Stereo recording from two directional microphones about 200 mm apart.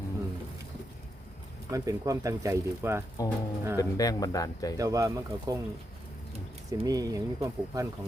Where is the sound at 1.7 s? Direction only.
15° right (ahead or behind).